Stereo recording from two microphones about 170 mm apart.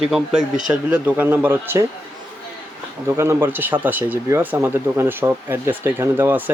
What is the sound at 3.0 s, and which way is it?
Speech, 15° right (ahead or behind).